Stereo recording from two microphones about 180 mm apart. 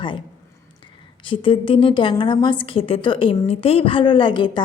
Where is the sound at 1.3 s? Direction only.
30° left (ahead or behind).